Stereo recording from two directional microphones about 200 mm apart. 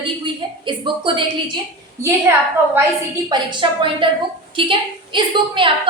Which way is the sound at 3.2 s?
25° right (ahead or behind).